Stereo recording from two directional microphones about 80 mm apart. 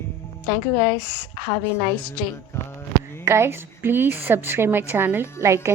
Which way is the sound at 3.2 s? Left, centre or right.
Right.